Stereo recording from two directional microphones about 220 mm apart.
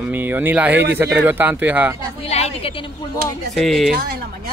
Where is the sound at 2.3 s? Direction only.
30° left (ahead or behind).